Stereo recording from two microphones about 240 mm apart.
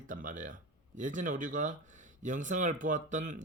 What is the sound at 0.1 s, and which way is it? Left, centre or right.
Speech, right.